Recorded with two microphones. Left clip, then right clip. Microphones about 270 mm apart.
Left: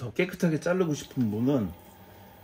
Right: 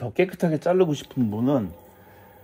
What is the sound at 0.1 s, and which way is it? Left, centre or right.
Speech, centre.